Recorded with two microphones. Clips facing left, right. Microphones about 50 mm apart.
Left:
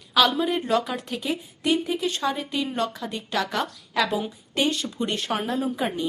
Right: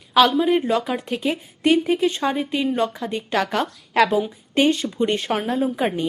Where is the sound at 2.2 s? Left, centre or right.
Right.